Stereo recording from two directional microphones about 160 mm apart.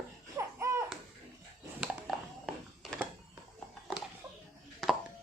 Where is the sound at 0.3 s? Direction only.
20° right (ahead or behind).